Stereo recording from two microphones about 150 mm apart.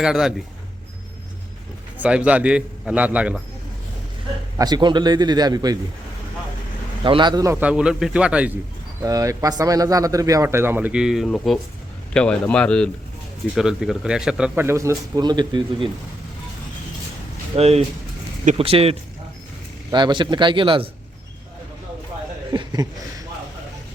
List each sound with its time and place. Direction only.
0.0 s speech: 5° right (ahead or behind)
2.0 s a man's voice: 10° right (ahead or behind)
4.5 s speech: 25° right (ahead or behind)
7.0 s speech: 30° right (ahead or behind)
7.6 s a man's voice: 5° right (ahead or behind)
9.0 s a man's voice: 25° right (ahead or behind)
17.6 s a man's voice: 40° right (ahead or behind)
19.9 s a man's voice: 30° right (ahead or behind)
22.5 s speech: 25° right (ahead or behind)